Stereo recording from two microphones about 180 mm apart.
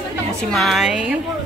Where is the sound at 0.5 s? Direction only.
Centre (ahead or behind).